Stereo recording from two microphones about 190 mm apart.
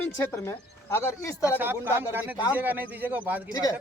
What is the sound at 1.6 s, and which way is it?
A man's voice, 10° right (ahead or behind).